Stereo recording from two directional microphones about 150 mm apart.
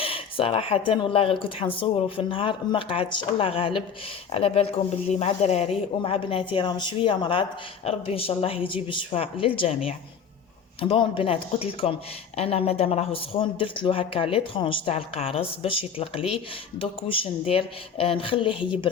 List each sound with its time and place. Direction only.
0.0 s speech: 40° left (ahead or behind)